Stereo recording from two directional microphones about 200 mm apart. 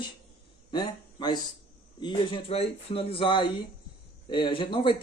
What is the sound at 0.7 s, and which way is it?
Speech, 20° left (ahead or behind).